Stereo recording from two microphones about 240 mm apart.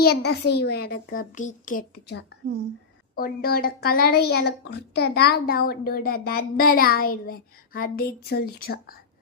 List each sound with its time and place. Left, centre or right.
0.0 s a woman's voice: left